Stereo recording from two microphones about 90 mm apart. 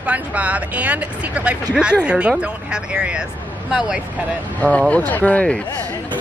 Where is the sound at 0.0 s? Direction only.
15° right (ahead or behind).